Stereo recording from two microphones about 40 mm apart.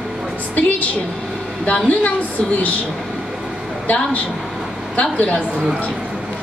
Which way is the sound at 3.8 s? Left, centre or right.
Left.